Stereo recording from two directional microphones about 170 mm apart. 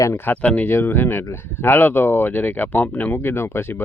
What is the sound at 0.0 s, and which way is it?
Speech, 15° left (ahead or behind).